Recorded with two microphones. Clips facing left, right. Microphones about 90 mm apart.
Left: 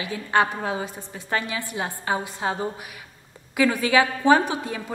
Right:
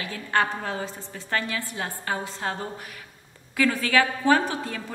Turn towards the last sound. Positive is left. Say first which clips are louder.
# left 3 dB
turn(degrees=15)  # may be behind; listen again after turning